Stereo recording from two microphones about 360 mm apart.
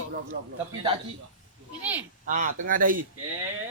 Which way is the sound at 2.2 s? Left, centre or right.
Right.